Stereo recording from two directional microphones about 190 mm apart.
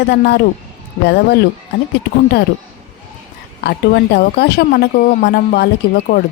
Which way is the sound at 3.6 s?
60° left (ahead or behind).